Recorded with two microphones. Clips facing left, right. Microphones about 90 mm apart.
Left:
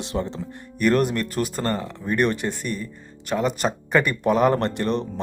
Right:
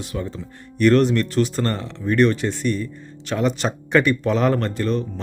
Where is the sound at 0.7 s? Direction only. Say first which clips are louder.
Right 4 dB; 10° left (ahead or behind).